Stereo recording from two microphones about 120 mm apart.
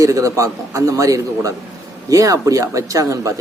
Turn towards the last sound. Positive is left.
turn(degrees=-25)  # may be behind; listen again after turning